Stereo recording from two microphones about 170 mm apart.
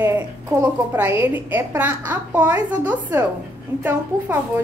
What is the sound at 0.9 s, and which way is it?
A woman's voice, 15° right (ahead or behind).